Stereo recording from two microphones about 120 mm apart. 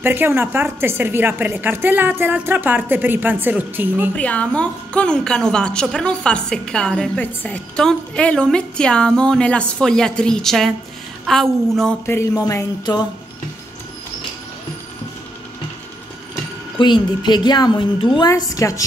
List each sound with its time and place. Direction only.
0.0 s a woman's voice: 20° right (ahead or behind)
4.1 s a woman's voice: 10° left (ahead or behind)
12.1 s music: 25° left (ahead or behind)
16.7 s a woman's voice: 40° left (ahead or behind)
18.3 s music: 25° left (ahead or behind)